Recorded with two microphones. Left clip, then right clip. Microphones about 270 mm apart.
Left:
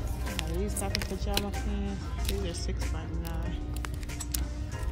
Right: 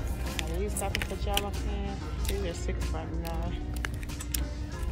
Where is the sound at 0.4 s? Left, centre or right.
Left.